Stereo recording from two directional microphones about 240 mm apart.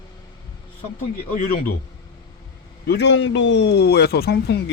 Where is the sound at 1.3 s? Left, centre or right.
Left.